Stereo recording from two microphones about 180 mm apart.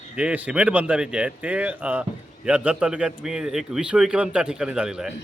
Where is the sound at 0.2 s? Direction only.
5° right (ahead or behind).